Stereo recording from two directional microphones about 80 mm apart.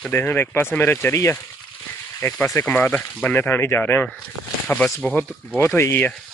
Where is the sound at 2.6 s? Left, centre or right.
Centre.